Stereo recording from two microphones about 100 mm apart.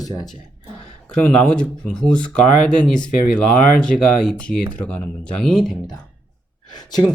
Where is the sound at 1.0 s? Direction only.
10° left (ahead or behind).